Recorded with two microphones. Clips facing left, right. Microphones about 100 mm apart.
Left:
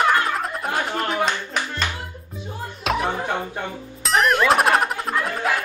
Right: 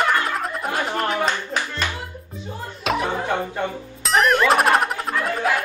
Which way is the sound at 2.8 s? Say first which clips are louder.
Even; centre (ahead or behind).